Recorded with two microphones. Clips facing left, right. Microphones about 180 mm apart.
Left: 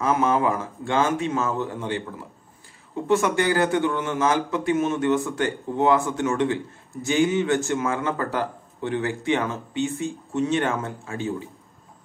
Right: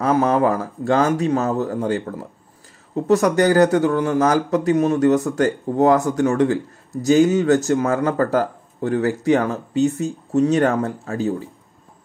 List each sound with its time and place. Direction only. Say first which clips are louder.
0.0 s a man's voice: right 4 dB; 35° right (ahead or behind)